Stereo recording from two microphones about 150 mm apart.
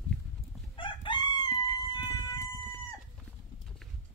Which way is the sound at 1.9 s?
25° left (ahead or behind).